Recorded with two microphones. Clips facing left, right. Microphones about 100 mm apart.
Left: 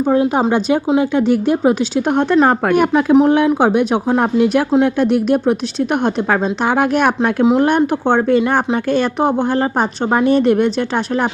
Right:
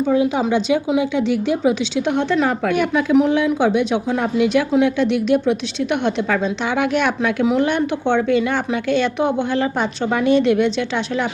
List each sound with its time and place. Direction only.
0.0 s a woman's voice: 50° left (ahead or behind)